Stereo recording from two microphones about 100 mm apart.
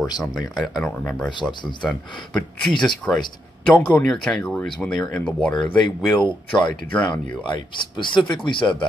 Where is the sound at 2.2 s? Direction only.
5° left (ahead or behind).